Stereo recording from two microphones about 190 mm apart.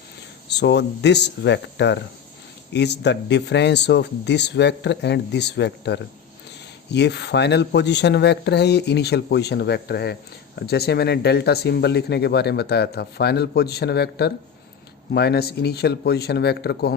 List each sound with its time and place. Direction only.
0.4 s speech: 65° left (ahead or behind)